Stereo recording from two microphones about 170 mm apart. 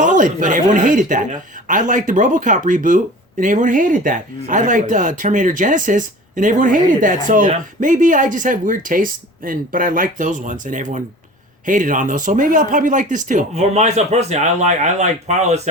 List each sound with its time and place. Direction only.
0.0 s speech: 50° right (ahead or behind)